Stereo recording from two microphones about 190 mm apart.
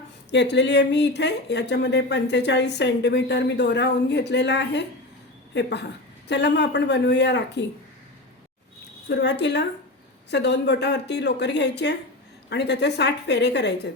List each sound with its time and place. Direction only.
0.3 s speech: 65° left (ahead or behind)
6.2 s speech: 65° left (ahead or behind)
9.0 s speech: 65° left (ahead or behind)